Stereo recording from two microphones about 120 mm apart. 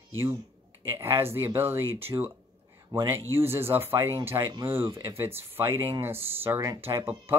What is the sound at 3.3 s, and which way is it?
Speech, 20° right (ahead or behind).